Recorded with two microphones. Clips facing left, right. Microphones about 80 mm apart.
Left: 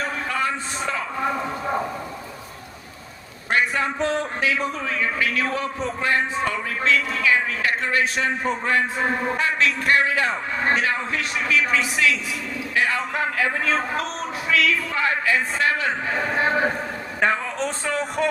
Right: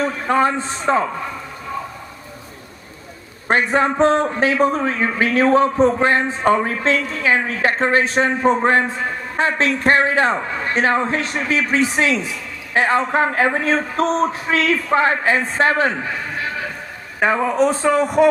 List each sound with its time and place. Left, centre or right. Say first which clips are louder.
0.3 s a man's voice: right 12 dB; right
3.5 s a man's voice: right 6 dB; right
16.3 s a sound: left 5 dB; left
17.2 s a man's voice: right 7 dB; centre